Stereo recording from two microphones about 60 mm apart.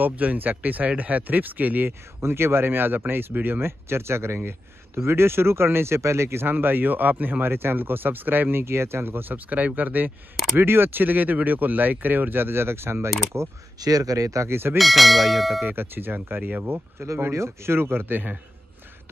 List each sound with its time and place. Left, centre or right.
0.0 s speech: right
13.7 s speech: right
14.5 s speech: right
14.8 s speech: centre
15.6 s speech: right
17.3 s speech: right